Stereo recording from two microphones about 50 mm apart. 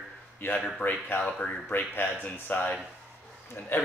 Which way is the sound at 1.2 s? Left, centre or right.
Centre.